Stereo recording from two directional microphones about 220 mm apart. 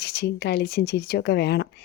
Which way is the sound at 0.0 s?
50° left (ahead or behind).